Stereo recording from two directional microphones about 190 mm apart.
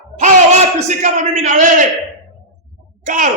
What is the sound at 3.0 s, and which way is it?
Speech, 45° right (ahead or behind).